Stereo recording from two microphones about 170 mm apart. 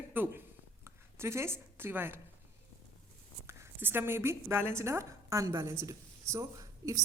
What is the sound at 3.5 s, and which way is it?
A woman's voice, 15° right (ahead or behind).